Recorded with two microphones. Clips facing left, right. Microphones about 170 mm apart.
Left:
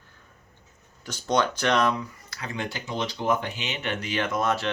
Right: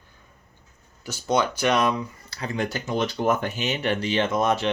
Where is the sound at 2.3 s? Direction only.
35° right (ahead or behind).